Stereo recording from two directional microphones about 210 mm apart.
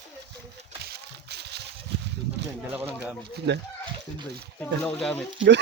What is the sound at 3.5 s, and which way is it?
Speech, 55° right (ahead or behind).